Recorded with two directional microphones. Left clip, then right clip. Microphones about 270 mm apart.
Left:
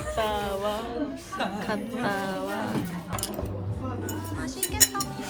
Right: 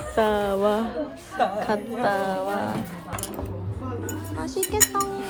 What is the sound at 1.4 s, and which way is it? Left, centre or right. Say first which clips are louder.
A woman's voice: right 7 dB; right.